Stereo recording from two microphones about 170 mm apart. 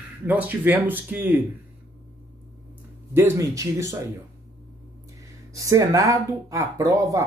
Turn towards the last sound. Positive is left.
turn(degrees=-20)  # may be behind; listen again after turning